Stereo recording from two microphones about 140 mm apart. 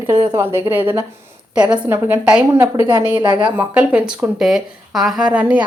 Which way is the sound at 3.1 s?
30° right (ahead or behind).